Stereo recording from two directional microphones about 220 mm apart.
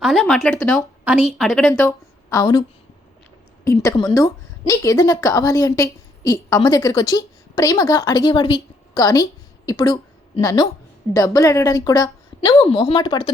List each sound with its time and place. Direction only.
0.0 s a woman's voice: centre (ahead or behind)
2.3 s a woman's voice: 15° left (ahead or behind)